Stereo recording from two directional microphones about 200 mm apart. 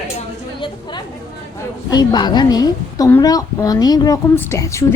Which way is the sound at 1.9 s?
20° left (ahead or behind).